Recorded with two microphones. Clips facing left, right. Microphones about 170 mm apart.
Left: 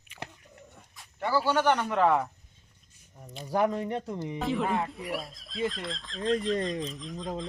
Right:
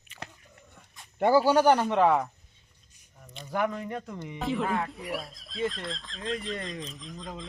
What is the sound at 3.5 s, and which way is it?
Speech, 30° left (ahead or behind).